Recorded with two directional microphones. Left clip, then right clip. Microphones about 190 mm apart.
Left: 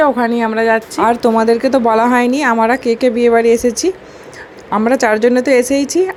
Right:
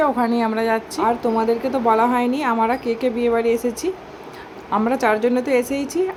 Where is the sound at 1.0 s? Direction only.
30° left (ahead or behind).